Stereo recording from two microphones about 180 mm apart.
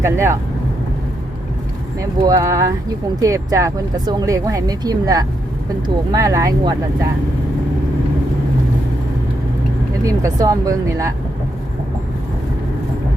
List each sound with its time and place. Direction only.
0.0 s speech: 15° right (ahead or behind)
2.0 s speech: 20° right (ahead or behind)
10.0 s speech: 20° right (ahead or behind)